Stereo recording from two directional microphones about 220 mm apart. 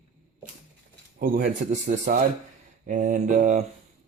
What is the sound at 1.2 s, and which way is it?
Speech, 40° right (ahead or behind).